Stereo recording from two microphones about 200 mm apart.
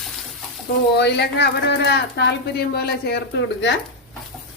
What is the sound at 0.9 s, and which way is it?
A woman's voice, 55° left (ahead or behind).